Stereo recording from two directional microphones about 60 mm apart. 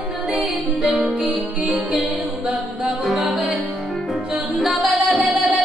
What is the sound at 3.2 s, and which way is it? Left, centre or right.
Music, right.